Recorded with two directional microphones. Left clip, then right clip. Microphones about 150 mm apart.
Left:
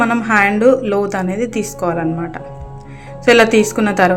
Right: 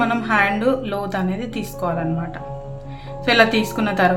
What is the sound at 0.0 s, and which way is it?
A woman's voice, 30° left (ahead or behind).